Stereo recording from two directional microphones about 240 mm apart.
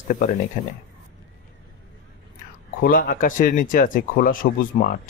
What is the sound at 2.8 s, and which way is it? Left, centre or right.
Speech, left.